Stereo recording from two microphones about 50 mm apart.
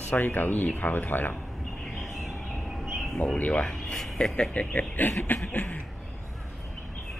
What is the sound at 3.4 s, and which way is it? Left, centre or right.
Speech, left.